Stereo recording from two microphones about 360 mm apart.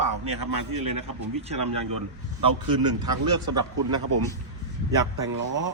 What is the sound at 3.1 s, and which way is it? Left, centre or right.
Speech, right.